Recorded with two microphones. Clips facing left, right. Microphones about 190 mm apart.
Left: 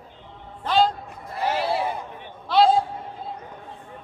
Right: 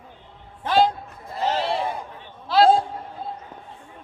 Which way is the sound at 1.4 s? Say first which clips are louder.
Even; 10° left (ahead or behind).